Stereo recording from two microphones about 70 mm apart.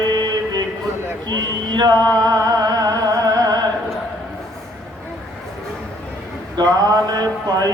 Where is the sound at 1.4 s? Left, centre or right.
Right.